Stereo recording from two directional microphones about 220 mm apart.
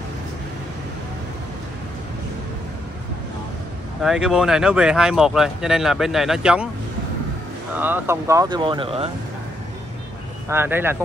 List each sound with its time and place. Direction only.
4.0 s speech: centre (ahead or behind)
7.7 s speech: 10° right (ahead or behind); by 9.1 s 25° right (ahead or behind)
10.5 s speech: 10° right (ahead or behind)